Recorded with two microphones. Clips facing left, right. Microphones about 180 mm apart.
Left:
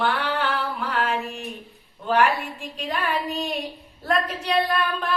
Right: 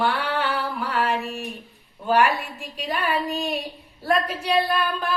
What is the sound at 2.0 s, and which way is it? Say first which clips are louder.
A woman's voice: right 1 dB; 5° right (ahead or behind).